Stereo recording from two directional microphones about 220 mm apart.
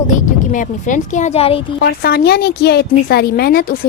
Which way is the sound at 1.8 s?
45° left (ahead or behind).